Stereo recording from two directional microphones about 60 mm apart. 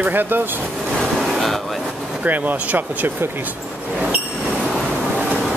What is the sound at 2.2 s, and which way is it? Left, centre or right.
Speech, right.